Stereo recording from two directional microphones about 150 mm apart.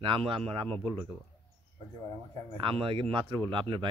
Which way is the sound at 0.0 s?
35° right (ahead or behind).